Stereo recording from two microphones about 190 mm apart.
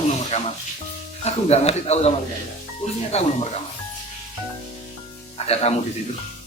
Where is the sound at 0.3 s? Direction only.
35° left (ahead or behind).